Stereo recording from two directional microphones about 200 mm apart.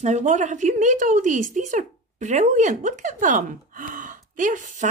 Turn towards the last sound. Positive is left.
turn(degrees=-40)  # may be behind; listen again after turning